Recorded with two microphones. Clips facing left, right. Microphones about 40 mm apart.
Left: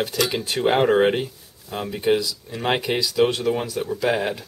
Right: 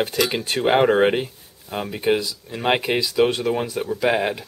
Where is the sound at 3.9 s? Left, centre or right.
Centre.